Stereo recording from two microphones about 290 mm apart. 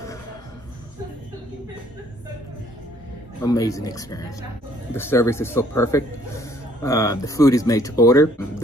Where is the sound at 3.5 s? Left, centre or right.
Centre.